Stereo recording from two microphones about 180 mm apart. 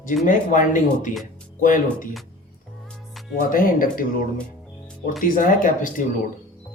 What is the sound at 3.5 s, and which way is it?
Speech, 50° left (ahead or behind).